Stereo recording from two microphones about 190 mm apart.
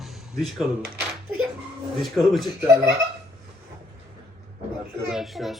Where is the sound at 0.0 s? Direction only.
Centre (ahead or behind).